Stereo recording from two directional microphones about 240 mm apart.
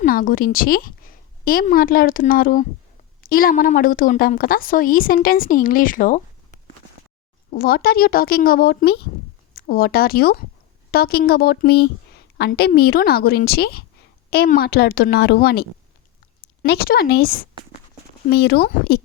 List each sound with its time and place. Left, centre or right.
0.0 s a woman's voice: left